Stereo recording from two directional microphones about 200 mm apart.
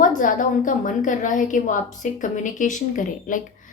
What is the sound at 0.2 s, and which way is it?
A woman's voice, 40° left (ahead or behind).